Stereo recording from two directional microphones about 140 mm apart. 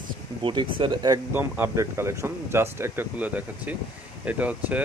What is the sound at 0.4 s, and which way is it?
Speech, 35° right (ahead or behind).